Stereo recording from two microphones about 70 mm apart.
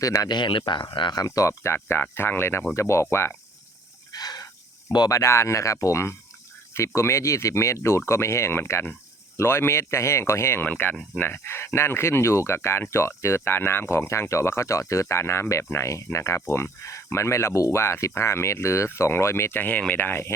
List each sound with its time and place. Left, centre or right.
0.0 s speech: left
0.3 s speech: left
1.1 s speech: left
4.1 s a sound: left
5.0 s speech: left
19.5 s speech: left